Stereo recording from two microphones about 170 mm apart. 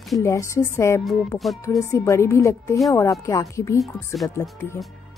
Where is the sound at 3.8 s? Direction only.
Centre (ahead or behind).